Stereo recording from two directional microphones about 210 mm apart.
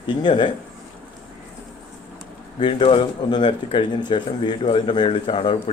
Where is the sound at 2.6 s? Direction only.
25° left (ahead or behind).